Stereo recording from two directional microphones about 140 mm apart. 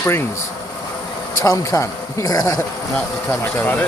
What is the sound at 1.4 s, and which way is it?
Speech, 25° left (ahead or behind).